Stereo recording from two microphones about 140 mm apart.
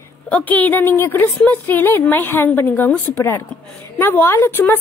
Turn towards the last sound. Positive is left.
turn(degrees=15)  # may be behind; listen again after turning